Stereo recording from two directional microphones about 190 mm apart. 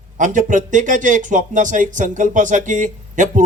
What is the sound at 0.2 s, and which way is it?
A man's voice, 40° right (ahead or behind).